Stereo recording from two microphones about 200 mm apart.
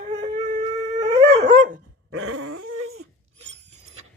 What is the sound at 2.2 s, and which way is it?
Dog, 90° right.